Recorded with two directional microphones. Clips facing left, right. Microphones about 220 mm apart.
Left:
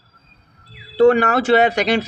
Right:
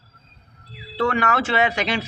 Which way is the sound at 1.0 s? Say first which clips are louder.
Left 9 dB; 35° left (ahead or behind).